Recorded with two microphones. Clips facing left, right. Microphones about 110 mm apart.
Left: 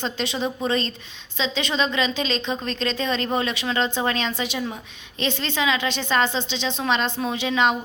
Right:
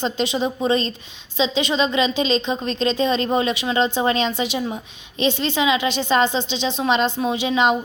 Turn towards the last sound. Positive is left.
turn(degrees=-20)  # may be behind; listen again after turning